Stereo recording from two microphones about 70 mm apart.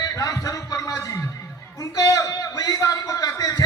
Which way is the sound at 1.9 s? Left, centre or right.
Left.